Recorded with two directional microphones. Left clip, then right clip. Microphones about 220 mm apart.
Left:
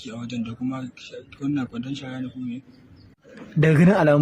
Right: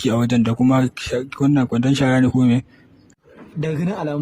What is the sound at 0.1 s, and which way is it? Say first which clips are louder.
Speech: right 12 dB; 50° right (ahead or behind).